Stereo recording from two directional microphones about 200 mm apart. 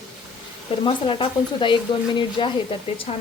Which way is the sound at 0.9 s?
25° left (ahead or behind).